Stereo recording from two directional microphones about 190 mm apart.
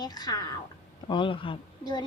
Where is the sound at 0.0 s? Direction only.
20° left (ahead or behind).